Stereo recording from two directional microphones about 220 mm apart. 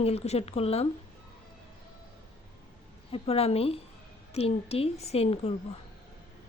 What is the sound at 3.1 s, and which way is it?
Speech, 25° left (ahead or behind).